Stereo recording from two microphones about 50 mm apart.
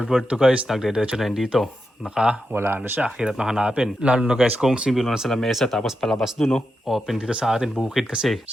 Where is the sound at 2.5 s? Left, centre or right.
Right.